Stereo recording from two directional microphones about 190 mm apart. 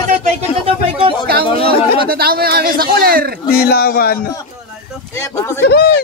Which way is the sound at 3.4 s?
55° left (ahead or behind).